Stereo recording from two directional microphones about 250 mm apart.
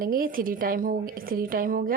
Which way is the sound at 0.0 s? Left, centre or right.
Right.